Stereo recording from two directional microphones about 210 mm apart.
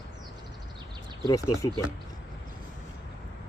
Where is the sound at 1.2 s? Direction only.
15° left (ahead or behind).